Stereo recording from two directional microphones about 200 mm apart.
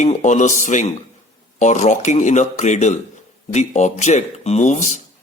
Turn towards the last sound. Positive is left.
turn(degrees=35)  # may be behind; listen again after turning